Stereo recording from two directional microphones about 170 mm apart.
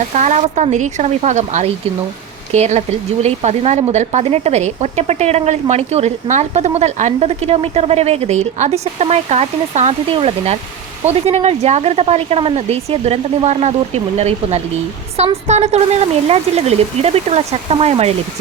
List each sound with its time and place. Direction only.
0.1 s speech: 45° right (ahead or behind)